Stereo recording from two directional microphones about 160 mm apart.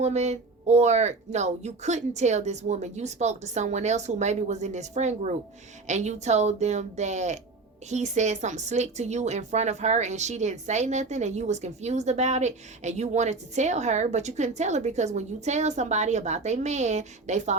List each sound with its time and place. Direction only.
0.0 s speech: 45° right (ahead or behind)